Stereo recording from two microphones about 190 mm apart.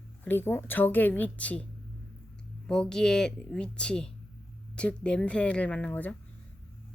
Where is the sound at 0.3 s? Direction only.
10° left (ahead or behind).